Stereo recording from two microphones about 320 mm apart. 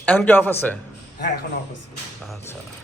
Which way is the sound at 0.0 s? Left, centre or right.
Centre.